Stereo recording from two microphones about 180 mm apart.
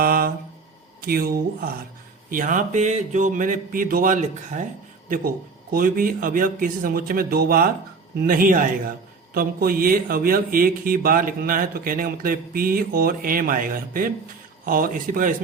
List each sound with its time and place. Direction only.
0.0 s a sound: 55° right (ahead or behind)
1.0 s speech: 55° right (ahead or behind)
2.3 s speech: 45° right (ahead or behind)